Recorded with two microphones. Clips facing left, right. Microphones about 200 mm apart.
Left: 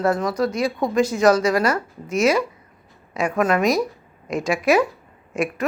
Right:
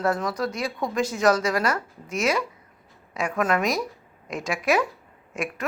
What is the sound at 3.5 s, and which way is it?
A woman's voice, centre (ahead or behind).